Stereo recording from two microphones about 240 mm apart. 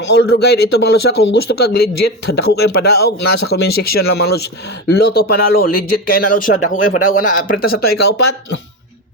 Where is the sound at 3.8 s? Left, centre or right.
Left.